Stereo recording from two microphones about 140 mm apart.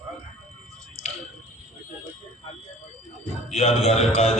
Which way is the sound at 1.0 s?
50° left (ahead or behind).